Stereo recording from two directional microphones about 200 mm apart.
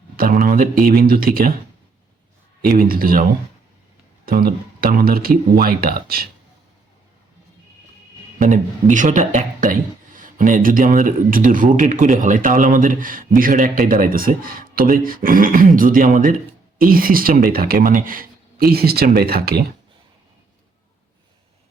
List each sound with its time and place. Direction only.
0.2 s a man's voice: 45° right (ahead or behind)
2.6 s a man's voice: 45° right (ahead or behind)
4.3 s a man's voice: 50° right (ahead or behind)
8.4 s a man's voice: 40° right (ahead or behind)